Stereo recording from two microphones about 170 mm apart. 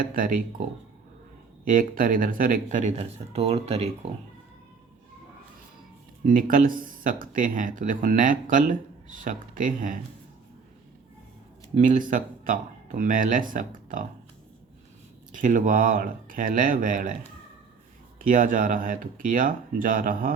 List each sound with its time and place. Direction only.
0.0 s speech: 55° right (ahead or behind)
1.6 s speech: 55° right (ahead or behind); by 4.1 s 35° right (ahead or behind)
6.2 s speech: 50° right (ahead or behind)
11.7 s speech: 45° right (ahead or behind)
15.3 s speech: 50° right (ahead or behind)
18.2 s speech: 50° right (ahead or behind)